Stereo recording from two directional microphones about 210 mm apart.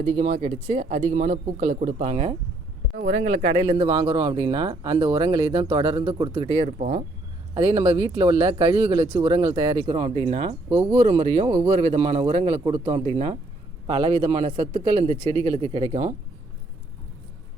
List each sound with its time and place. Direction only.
0.0 s speech: 35° right (ahead or behind)
2.9 s speech: 40° right (ahead or behind); by 6.7 s 25° right (ahead or behind)
6.7 s speech: 35° right (ahead or behind)
7.5 s speech: 20° right (ahead or behind)